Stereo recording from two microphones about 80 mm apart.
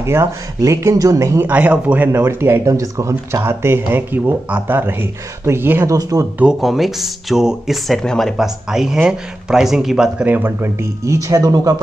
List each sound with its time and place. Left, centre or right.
0.0 s speech: right
1.5 s speech: centre
2.2 s speech: right
5.9 s speech: right
6.6 s speech: centre
10.2 s speech: right